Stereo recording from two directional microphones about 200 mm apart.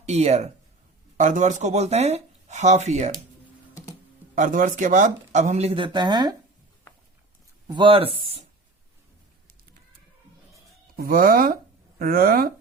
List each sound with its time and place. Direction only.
0.0 s speech: 35° right (ahead or behind)
4.4 s speech: 40° right (ahead or behind); by 6.3 s 20° right (ahead or behind)
7.7 s speech: 25° right (ahead or behind)
10.9 s speech: 45° right (ahead or behind)